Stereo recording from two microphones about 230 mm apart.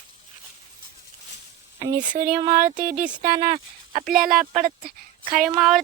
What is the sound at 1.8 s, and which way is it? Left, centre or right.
Speech, right.